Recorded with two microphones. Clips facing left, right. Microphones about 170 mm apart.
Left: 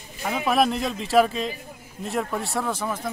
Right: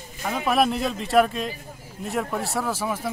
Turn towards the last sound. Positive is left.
turn(degrees=-5)  # may be behind; listen again after turning